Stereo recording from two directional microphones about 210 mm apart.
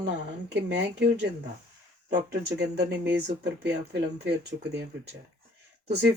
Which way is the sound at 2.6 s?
50° right (ahead or behind).